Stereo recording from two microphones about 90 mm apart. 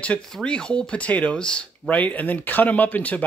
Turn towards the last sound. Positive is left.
turn(degrees=15)  # may be behind; listen again after turning